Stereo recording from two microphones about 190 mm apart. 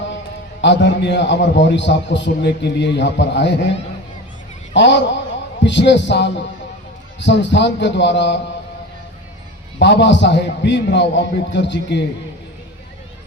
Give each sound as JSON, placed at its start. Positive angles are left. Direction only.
{"t": 0.6, "sound": "a man's voice", "side_deg": 70}
{"t": 9.7, "sound": "a man's voice", "side_deg": 65}